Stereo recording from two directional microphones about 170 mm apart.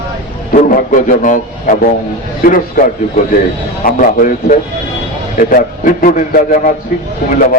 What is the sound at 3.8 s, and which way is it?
A man's voice, 50° left (ahead or behind).